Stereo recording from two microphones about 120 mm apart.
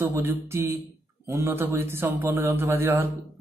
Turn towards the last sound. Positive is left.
turn(degrees=-20)  # may be behind; listen again after turning